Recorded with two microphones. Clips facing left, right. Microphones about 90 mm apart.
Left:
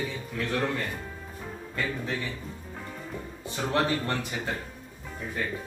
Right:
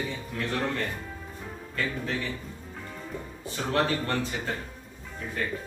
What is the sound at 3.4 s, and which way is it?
Speech, 20° left (ahead or behind).